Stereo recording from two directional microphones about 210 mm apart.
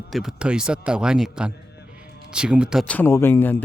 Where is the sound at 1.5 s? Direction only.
50° left (ahead or behind).